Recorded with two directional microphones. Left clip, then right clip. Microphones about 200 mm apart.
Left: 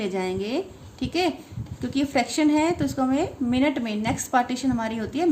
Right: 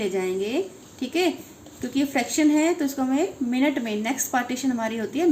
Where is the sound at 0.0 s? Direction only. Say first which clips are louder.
Right 2 dB; 50° left (ahead or behind).